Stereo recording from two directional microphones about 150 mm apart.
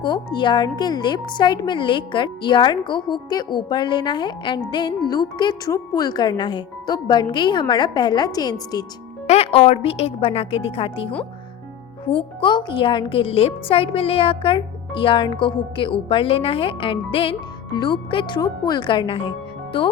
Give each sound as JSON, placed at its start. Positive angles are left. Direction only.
{"t": 0.0, "sound": "speech", "side_deg": 30}
{"t": 9.2, "sound": "speech", "side_deg": 45}